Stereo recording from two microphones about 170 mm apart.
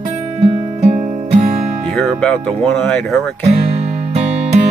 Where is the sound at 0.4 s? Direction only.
35° right (ahead or behind).